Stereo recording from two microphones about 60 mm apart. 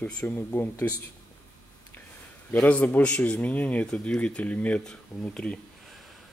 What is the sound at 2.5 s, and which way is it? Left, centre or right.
A man's voice, left.